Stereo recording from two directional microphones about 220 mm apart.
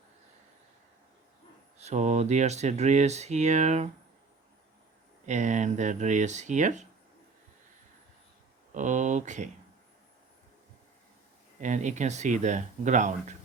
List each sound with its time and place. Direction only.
1.8 s speech: 30° right (ahead or behind)
5.2 s speech: 35° right (ahead or behind)
8.7 s speech: 35° right (ahead or behind)
11.6 s speech: 35° right (ahead or behind)